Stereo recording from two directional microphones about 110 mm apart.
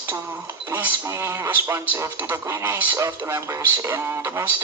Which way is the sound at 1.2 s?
25° right (ahead or behind).